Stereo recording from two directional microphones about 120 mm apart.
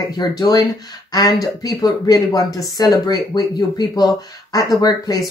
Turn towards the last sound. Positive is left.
turn(degrees=30)  # may be behind; listen again after turning